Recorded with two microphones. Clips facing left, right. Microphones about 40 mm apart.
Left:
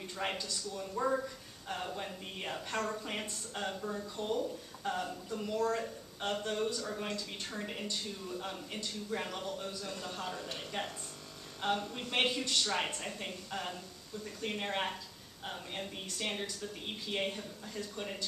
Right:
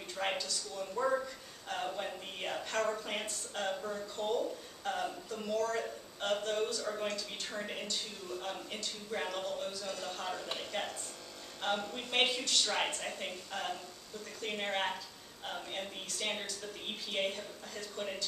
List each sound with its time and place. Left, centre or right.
0.1 s a man's voice: centre
1.0 s speech: centre
1.7 s a woman's voice: centre
4.2 s speech: centre
4.9 s a woman's voice: centre
11.6 s speech: centre
12.0 s a woman's voice: centre